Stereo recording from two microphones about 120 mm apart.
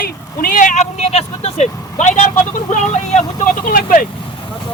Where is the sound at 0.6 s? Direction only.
85° left.